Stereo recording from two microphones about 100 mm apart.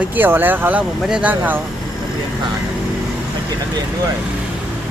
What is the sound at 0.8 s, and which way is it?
Speech, 5° right (ahead or behind).